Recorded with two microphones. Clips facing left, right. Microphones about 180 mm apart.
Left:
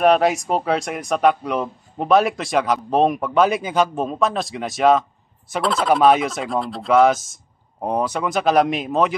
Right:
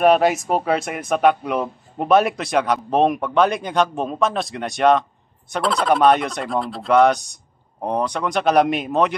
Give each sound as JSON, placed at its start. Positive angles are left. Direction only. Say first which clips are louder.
{"t": 0.0, "sound": "speech", "louder": "right 1 dB", "side_deg": 0}